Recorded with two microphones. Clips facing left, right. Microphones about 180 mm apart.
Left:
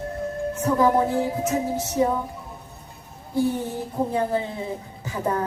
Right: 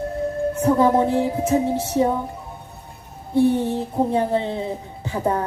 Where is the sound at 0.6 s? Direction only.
30° right (ahead or behind).